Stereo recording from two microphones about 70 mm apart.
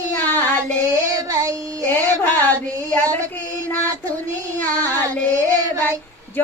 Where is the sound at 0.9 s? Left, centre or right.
Right.